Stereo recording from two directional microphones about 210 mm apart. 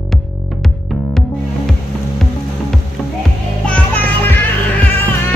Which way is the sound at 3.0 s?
Centre (ahead or behind).